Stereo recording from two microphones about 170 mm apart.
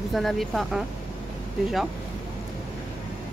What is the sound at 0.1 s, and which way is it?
Speech, centre (ahead or behind).